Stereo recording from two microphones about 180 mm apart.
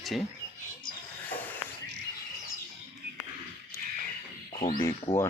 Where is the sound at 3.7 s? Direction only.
15° left (ahead or behind).